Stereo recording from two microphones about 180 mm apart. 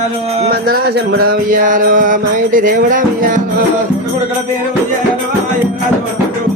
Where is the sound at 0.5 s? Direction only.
60° right (ahead or behind).